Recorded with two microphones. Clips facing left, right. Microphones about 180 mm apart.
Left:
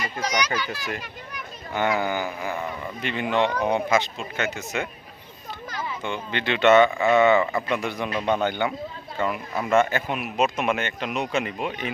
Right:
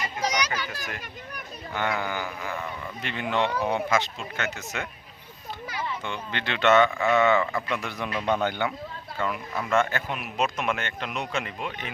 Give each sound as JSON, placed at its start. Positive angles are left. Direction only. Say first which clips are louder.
{"t": 0.2, "sound": "a child's voice", "louder": "left 2 dB", "side_deg": -35}
{"t": 1.7, "sound": "speech", "louder": "left 5 dB", "side_deg": 20}
{"t": 3.0, "sound": "speech", "louder": "left 3 dB", "side_deg": 5}
{"t": 3.7, "sound": "speech", "louder": "left 3 dB", "side_deg": 15}
{"t": 6.0, "sound": "speech", "louder": "left 4 dB", "side_deg": 5}